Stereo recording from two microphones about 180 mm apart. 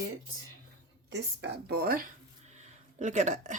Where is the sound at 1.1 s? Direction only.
65° right (ahead or behind).